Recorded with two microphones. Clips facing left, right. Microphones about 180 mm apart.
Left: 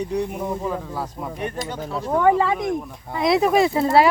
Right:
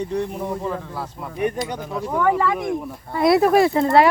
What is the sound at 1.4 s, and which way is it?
Speech, 15° right (ahead or behind).